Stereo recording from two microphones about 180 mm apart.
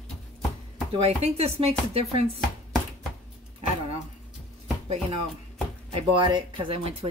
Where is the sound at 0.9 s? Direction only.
35° right (ahead or behind).